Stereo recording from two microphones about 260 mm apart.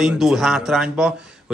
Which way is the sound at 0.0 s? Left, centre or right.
Centre.